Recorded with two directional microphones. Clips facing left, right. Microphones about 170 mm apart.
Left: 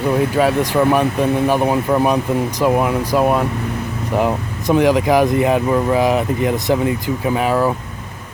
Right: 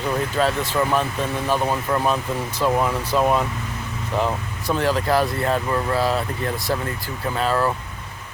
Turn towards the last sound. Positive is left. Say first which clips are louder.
# left 5 dB
turn(degrees=15)  # may be behind; listen again after turning